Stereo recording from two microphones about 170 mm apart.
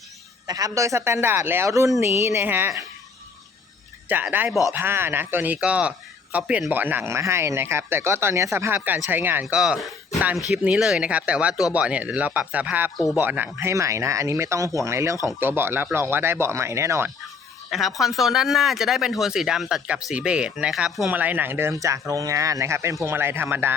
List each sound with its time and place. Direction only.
0.4 s speech: 20° right (ahead or behind)
4.1 s speech: 10° right (ahead or behind)
17.7 s speech: centre (ahead or behind)